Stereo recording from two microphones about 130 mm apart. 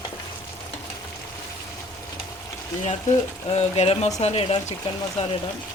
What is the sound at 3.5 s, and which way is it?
Speech, 55° left (ahead or behind).